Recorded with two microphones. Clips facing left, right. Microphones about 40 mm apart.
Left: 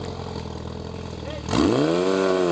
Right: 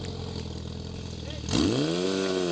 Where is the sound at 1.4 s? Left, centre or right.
Centre.